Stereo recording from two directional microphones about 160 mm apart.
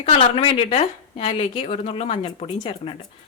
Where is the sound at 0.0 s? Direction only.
35° left (ahead or behind).